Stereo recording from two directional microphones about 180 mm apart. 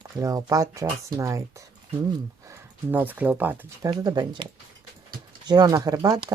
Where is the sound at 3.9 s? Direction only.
20° right (ahead or behind).